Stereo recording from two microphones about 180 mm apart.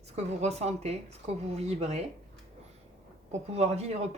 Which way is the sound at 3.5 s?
35° right (ahead or behind).